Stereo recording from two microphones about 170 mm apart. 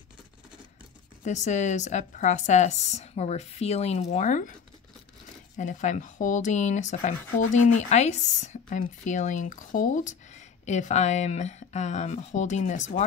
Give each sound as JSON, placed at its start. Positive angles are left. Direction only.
{"t": 1.2, "sound": "speech", "side_deg": 45}
{"t": 5.6, "sound": "speech", "side_deg": 45}